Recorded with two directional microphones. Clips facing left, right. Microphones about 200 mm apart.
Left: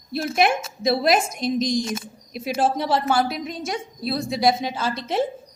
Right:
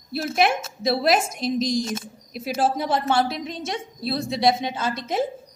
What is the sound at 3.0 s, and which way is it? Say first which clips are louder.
A woman's voice: even; 25° right (ahead or behind).